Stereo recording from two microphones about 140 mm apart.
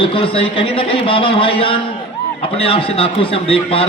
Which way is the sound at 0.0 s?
40° left (ahead or behind).